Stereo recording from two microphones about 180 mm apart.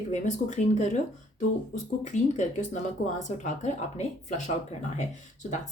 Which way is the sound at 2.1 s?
40° left (ahead or behind).